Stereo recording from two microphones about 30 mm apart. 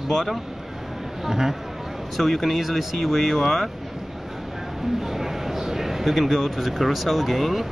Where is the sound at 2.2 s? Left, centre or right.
Centre.